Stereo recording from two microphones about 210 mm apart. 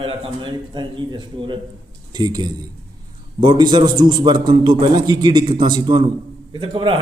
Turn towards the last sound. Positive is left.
turn(degrees=-25)  # may be behind; listen again after turning